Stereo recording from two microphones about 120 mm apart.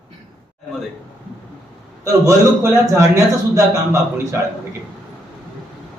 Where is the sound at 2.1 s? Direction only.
25° right (ahead or behind).